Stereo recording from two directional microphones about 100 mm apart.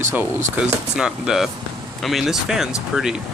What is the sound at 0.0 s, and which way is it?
Speech, 20° right (ahead or behind).